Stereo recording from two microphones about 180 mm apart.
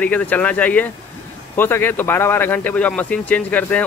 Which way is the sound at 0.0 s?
10° left (ahead or behind).